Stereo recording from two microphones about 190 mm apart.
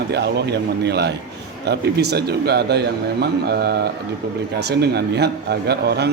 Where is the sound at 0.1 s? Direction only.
60° right (ahead or behind).